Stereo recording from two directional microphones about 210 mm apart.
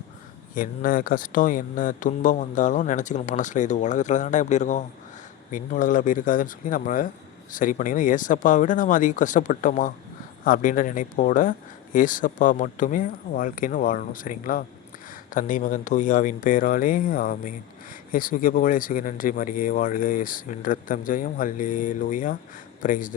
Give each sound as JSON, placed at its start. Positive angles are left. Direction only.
{"t": 0.5, "sound": "speech", "side_deg": 40}